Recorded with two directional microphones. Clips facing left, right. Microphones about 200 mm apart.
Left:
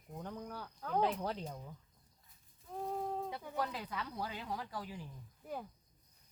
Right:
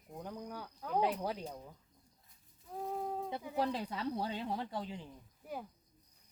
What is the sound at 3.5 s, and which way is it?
Speech, 30° right (ahead or behind).